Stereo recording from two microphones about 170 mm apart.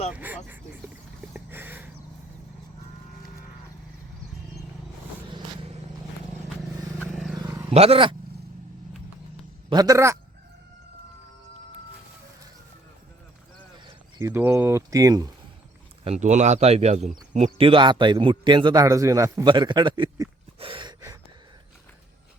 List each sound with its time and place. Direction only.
0.1 s speech: 10° right (ahead or behind)
1.5 s a sound: 10° right (ahead or behind)
7.3 s roar: 15° right (ahead or behind)
7.7 s speech: 35° right (ahead or behind)
9.6 s a man's voice: 20° right (ahead or behind)
13.8 s speech: 20° right (ahead or behind)
16.0 s a man's voice: 40° right (ahead or behind); by 20.3 s 25° right (ahead or behind)
20.6 s gasp: 30° right (ahead or behind)